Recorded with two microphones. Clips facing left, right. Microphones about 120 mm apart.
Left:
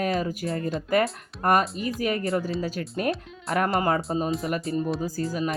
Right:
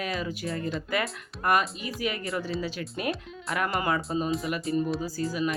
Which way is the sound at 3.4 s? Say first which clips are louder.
Left 4 dB; 30° left (ahead or behind).